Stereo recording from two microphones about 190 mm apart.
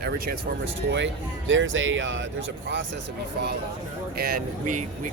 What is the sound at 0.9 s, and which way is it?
Speech, 70° right (ahead or behind).